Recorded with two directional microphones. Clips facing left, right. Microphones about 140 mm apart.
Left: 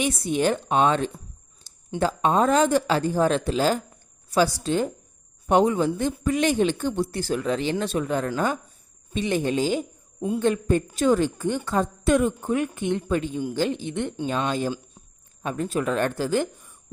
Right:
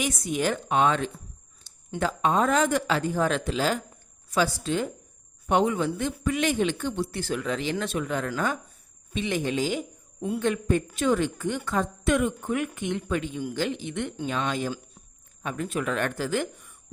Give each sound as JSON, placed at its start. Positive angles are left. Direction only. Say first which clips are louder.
{"t": 0.0, "sound": "a man's voice", "louder": "left 4 dB", "side_deg": 30}